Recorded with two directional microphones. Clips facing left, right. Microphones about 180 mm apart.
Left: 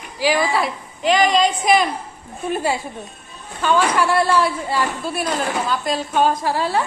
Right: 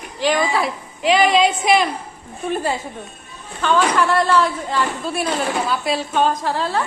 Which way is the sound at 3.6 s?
10° left (ahead or behind).